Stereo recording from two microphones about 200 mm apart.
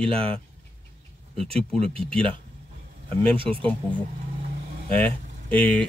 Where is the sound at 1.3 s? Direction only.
30° right (ahead or behind).